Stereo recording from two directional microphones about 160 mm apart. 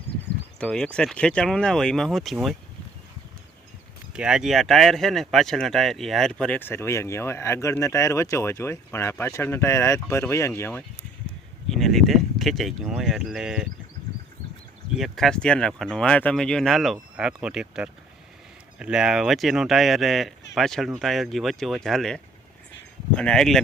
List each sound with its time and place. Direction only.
0.6 s speech: 5° left (ahead or behind)
4.1 s speech: 5° right (ahead or behind); by 10.8 s 15° left (ahead or behind)
11.7 s speech: centre (ahead or behind)
14.9 s speech: centre (ahead or behind)